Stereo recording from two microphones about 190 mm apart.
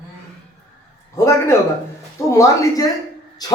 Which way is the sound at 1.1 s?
15° left (ahead or behind).